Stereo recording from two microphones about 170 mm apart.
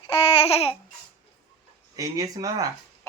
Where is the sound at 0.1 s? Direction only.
35° left (ahead or behind).